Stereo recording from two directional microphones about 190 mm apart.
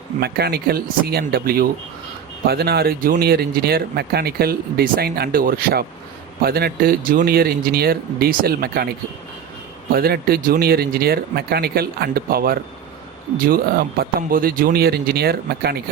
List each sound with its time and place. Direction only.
0.2 s speech: 55° right (ahead or behind)
9.9 s speech: 55° right (ahead or behind)